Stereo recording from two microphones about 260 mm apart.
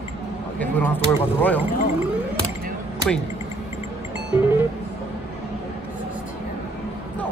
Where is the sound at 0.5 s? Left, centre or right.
Centre.